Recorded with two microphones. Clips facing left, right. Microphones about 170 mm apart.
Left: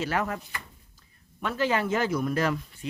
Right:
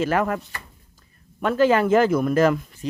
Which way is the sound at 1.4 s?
50° right (ahead or behind).